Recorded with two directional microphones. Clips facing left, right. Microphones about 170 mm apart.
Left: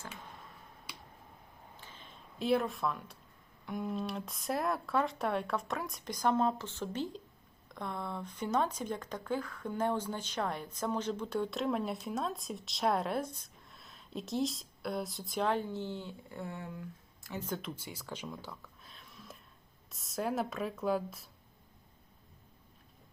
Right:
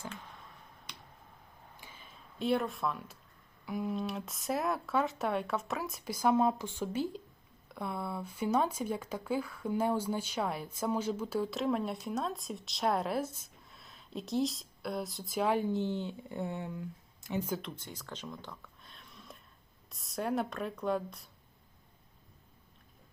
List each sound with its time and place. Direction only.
0.9 s finger snapping: 10° left (ahead or behind)
1.7 s a sound: 10° right (ahead or behind)
3.7 s speech: centre (ahead or behind); by 17.5 s 20° right (ahead or behind)
17.5 s speech: centre (ahead or behind)